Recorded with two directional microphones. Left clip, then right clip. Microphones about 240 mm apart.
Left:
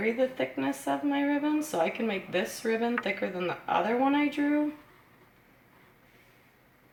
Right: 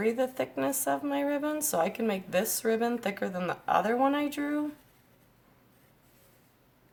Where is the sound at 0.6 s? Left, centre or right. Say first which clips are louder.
Right 2 dB; right.